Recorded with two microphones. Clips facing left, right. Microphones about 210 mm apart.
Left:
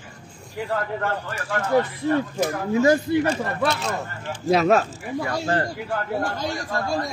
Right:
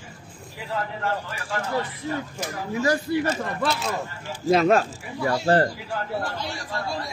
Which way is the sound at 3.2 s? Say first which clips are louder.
Left 2 dB; 5° right (ahead or behind).